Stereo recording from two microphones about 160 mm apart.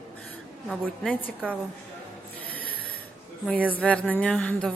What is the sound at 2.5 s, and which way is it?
Rub, 65° left (ahead or behind).